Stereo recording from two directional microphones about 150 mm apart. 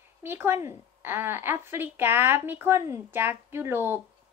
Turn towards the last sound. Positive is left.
turn(degrees=-15)  # may be behind; listen again after turning